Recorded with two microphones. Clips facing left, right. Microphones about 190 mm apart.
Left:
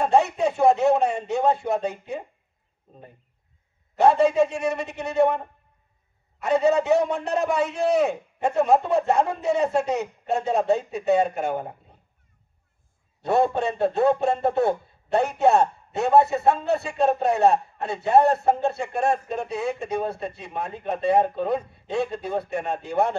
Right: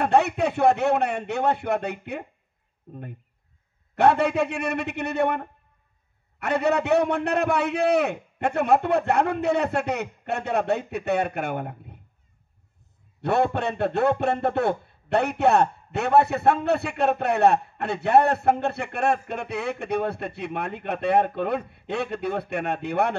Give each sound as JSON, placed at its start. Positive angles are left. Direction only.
{"t": 0.0, "sound": "a man's voice", "side_deg": -65}
{"t": 3.9, "sound": "a man's voice", "side_deg": -65}
{"t": 6.4, "sound": "a man's voice", "side_deg": -65}
{"t": 13.2, "sound": "a man's voice", "side_deg": -65}